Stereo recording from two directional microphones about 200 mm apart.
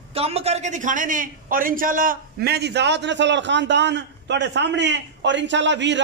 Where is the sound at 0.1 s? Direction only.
30° right (ahead or behind).